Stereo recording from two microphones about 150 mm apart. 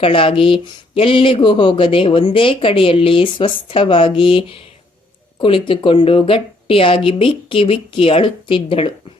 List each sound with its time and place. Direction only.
0.0 s speech: 35° left (ahead or behind)